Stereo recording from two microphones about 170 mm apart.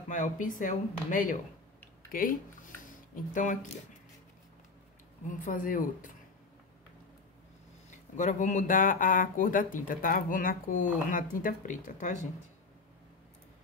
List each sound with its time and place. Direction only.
0.1 s speech: 50° left (ahead or behind)
2.9 s a sound: 50° left (ahead or behind)
5.3 s speech: 50° left (ahead or behind)
8.2 s speech: 45° left (ahead or behind)